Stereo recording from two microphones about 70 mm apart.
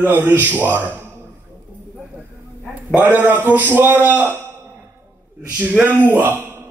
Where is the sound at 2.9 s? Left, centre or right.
Right.